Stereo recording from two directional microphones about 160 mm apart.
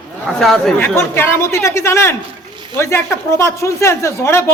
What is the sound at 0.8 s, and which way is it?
Speech, 15° left (ahead or behind).